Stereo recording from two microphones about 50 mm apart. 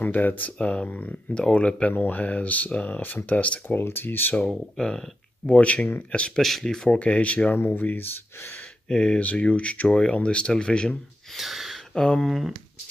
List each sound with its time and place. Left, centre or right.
0.0 s speech: left
0.6 s speech: left
2.0 s speech: left
3.6 s speech: left
4.5 s speech: centre
5.5 s speech: left
6.4 s speech: centre
7.0 s speech: left
7.5 s speech: left
8.8 s speech: left
11.3 s speech: centre
11.9 s speech: centre
12.3 s speech: centre